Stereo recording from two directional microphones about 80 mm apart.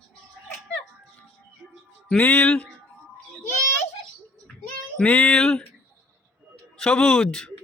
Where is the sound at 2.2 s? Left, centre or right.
Centre.